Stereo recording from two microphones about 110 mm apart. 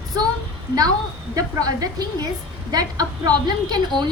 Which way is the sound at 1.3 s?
35° right (ahead or behind).